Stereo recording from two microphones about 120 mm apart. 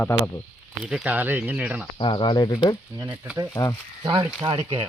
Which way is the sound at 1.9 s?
40° left (ahead or behind).